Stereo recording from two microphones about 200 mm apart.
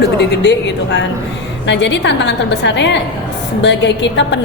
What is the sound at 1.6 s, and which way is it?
A woman's voice, 60° left (ahead or behind).